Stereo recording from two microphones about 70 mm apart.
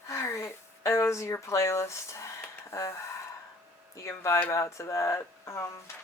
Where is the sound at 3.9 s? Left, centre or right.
Left.